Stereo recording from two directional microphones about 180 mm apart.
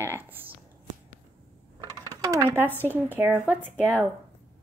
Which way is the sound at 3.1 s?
10° right (ahead or behind).